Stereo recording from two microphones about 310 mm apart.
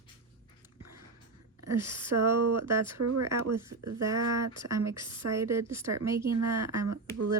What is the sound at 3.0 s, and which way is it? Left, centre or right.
Speech, right.